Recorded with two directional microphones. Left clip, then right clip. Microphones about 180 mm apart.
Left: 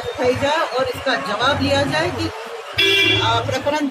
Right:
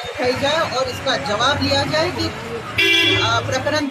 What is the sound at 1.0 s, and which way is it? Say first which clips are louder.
Speech: right 2 dB; centre (ahead or behind).